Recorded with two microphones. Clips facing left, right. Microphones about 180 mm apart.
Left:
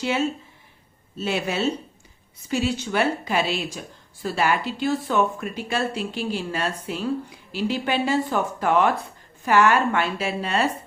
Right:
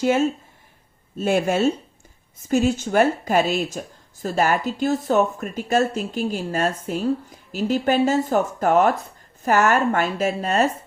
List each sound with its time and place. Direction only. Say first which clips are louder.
0.0 s a woman's voice: right 5 dB; 45° right (ahead or behind)